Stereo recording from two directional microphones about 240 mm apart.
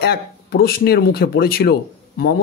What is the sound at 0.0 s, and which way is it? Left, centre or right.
Speech, left.